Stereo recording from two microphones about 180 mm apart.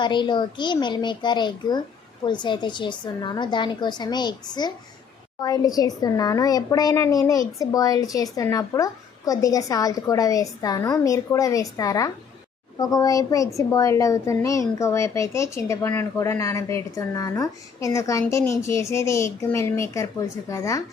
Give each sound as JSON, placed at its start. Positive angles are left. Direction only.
{"t": 0.0, "sound": "a woman's voice", "side_deg": 25}